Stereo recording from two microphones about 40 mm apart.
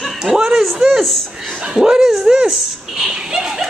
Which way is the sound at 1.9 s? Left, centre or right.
Centre.